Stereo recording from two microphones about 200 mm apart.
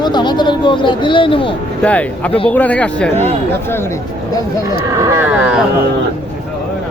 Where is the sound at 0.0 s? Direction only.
20° left (ahead or behind).